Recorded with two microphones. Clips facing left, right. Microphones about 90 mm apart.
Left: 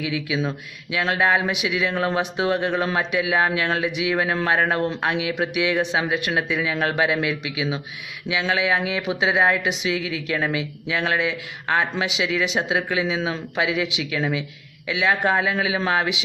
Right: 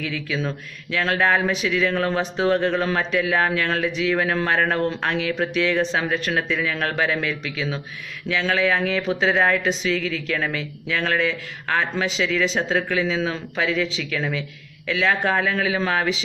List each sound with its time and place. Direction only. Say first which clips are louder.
0.0 s speech: left 2 dB; 15° left (ahead or behind)